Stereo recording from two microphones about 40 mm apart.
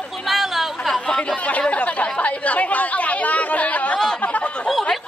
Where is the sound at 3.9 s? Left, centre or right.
Centre.